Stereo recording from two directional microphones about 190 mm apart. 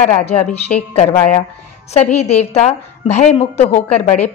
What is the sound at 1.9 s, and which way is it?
A woman's voice, 35° left (ahead or behind).